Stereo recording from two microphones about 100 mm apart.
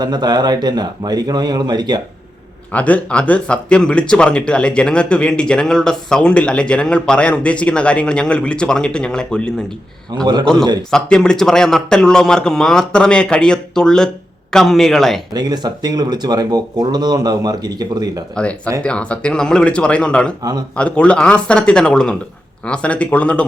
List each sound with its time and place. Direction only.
0.0 s speech: 45° right (ahead or behind)
2.7 s speech: 15° left (ahead or behind)
15.3 s speech: 45° right (ahead or behind)
18.3 s speech: 15° left (ahead or behind)
20.4 s a man's voice: 40° right (ahead or behind)
20.7 s speech: 10° left (ahead or behind)